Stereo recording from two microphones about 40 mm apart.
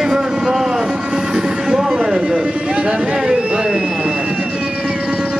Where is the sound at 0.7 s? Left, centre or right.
Centre.